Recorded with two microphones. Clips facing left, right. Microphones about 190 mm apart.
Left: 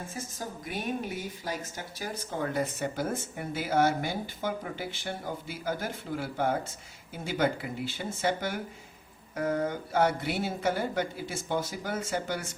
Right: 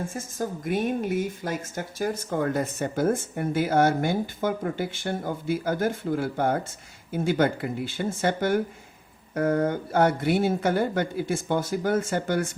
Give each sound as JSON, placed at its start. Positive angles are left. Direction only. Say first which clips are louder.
{"t": 0.1, "sound": "speech", "louder": "right 7 dB", "side_deg": -50}